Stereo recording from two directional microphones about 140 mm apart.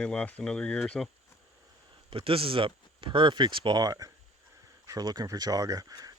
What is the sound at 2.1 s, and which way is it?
Speech, 40° right (ahead or behind).